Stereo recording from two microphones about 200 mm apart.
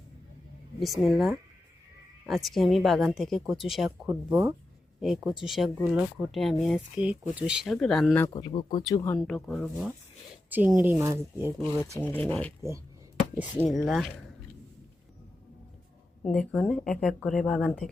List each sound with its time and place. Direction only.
0.8 s speech: centre (ahead or behind)
8.3 s speech: 20° left (ahead or behind)
9.2 s speech: centre (ahead or behind)
11.9 s speech: 10° left (ahead or behind)
13.6 s speech: centre (ahead or behind)
16.2 s speech: 5° left (ahead or behind)